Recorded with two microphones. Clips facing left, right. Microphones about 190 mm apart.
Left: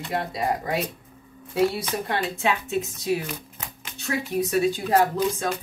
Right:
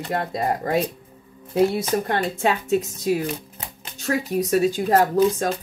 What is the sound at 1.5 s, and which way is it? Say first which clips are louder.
Speech: right 4 dB; 45° right (ahead or behind).